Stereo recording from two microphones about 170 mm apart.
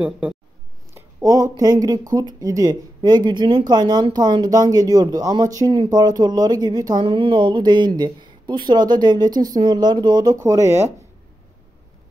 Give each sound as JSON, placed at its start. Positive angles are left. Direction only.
{"t": 0.9, "sound": "speech", "side_deg": -20}